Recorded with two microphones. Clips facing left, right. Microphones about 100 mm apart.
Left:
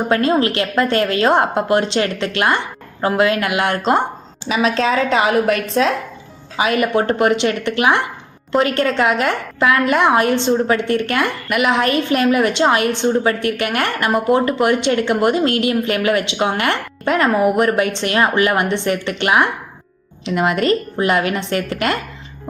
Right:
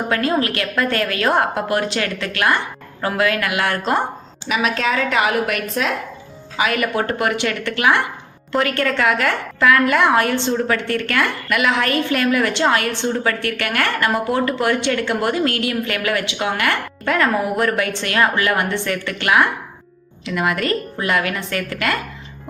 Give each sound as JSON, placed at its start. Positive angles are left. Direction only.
{"t": 0.1, "sound": "a woman's voice", "side_deg": 25}